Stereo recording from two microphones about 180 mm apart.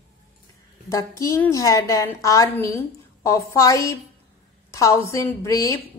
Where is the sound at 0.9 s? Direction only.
15° left (ahead or behind).